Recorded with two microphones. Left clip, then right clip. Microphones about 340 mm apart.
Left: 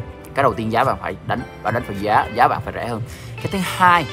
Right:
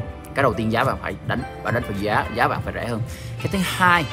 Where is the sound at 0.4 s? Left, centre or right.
Centre.